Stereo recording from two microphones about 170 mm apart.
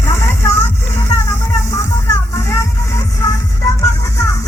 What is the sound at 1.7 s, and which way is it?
Music, 15° left (ahead or behind).